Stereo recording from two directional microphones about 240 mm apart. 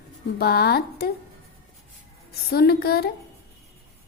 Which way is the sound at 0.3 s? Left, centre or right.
Left.